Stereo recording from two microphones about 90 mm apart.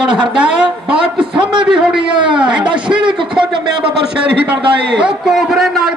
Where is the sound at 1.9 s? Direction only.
60° right (ahead or behind).